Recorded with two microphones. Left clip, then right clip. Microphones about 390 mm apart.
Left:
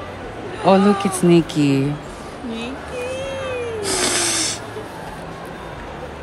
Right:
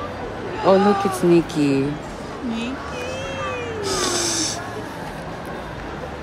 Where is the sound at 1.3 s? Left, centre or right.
Centre.